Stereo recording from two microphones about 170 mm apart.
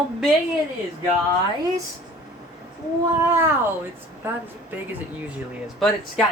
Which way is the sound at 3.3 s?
15° right (ahead or behind).